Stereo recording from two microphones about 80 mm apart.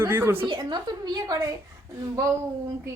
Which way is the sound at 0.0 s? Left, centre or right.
Right.